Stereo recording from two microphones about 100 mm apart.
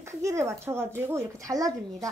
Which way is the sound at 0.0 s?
30° right (ahead or behind).